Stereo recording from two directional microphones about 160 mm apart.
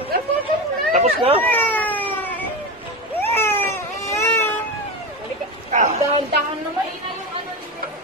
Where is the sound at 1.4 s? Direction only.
10° left (ahead or behind).